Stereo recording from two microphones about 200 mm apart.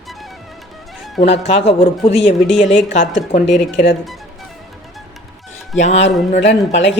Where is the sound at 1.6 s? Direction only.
30° left (ahead or behind).